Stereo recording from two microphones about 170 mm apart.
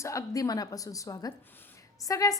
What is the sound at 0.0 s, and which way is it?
A woman's voice, 20° left (ahead or behind).